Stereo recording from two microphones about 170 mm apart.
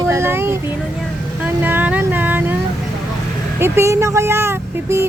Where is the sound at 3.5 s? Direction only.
15° right (ahead or behind).